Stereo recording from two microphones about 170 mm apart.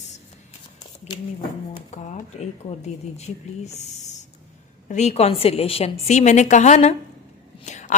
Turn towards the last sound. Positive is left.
turn(degrees=45)  # may be behind; listen again after turning